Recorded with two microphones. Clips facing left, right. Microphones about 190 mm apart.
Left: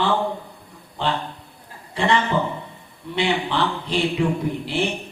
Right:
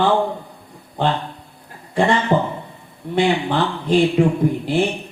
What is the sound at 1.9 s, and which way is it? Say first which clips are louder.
Speech: right 4 dB; 50° right (ahead or behind).